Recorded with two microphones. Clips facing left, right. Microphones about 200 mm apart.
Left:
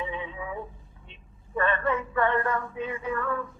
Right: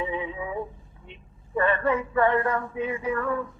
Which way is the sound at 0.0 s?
20° right (ahead or behind).